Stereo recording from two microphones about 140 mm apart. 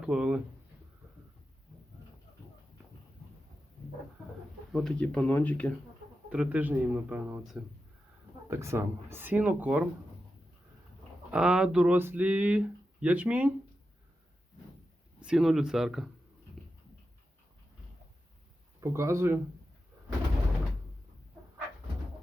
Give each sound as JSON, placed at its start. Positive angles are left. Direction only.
{"t": 0.0, "sound": "speech", "side_deg": -5}
{"t": 4.7, "sound": "speech", "side_deg": 5}
{"t": 6.3, "sound": "speech", "side_deg": -10}
{"t": 8.4, "sound": "speech", "side_deg": -20}
{"t": 11.3, "sound": "speech", "side_deg": -5}
{"t": 15.2, "sound": "speech", "side_deg": -5}
{"t": 16.6, "sound": "dog", "side_deg": 0}
{"t": 18.8, "sound": "speech", "side_deg": -20}